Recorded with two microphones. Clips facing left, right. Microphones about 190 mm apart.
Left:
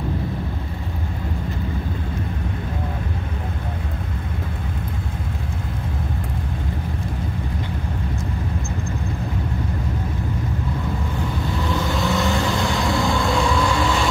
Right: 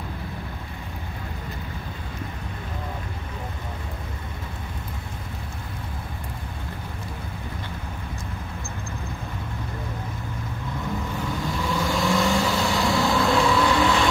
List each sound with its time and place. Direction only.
11.7 s vehicle: centre (ahead or behind)